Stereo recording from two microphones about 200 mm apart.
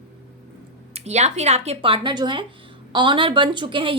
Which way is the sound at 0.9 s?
35° right (ahead or behind).